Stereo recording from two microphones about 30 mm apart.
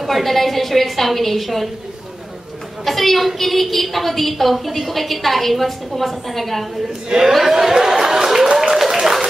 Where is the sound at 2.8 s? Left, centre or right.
Centre.